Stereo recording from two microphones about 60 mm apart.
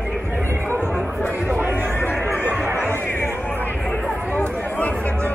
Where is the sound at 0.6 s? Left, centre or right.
Left.